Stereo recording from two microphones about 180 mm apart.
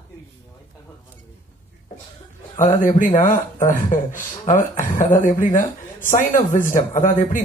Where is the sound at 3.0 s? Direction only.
45° left (ahead or behind).